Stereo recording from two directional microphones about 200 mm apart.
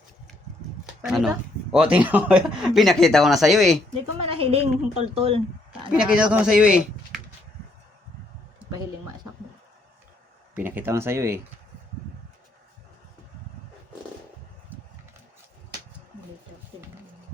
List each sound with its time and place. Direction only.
1.0 s speech: centre (ahead or behind)
4.2 s a woman's voice: 30° right (ahead or behind)
5.9 s speech: 5° right (ahead or behind)
10.5 s speech: 10° right (ahead or behind)